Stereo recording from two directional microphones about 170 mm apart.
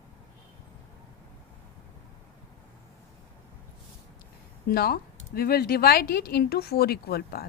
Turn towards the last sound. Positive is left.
turn(degrees=65)  # may be behind; listen again after turning